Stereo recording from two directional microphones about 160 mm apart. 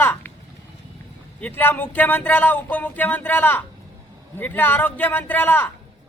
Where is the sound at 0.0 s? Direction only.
15° left (ahead or behind).